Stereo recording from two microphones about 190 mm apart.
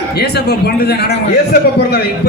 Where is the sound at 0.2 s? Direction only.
60° left (ahead or behind).